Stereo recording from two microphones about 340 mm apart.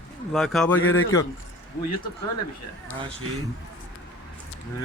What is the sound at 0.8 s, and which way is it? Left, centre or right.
Speech, left.